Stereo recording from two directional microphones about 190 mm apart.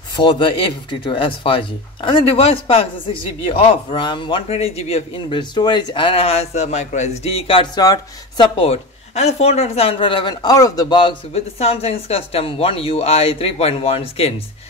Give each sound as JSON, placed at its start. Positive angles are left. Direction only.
{"t": 0.1, "sound": "speech", "side_deg": 25}